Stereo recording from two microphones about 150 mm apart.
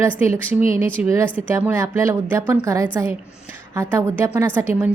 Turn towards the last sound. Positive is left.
turn(degrees=-15)  # may be behind; listen again after turning